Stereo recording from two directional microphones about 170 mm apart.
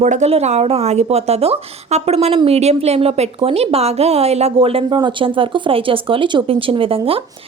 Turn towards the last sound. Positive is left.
turn(degrees=-35)  # may be behind; listen again after turning